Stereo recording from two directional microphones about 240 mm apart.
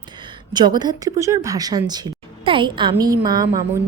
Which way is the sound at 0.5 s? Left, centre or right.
Centre.